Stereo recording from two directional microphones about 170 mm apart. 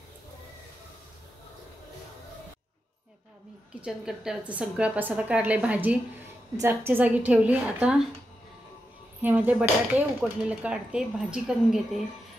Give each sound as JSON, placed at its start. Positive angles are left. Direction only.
{"t": 3.8, "sound": "a woman's voice", "side_deg": -5}
{"t": 9.2, "sound": "a woman's voice", "side_deg": -10}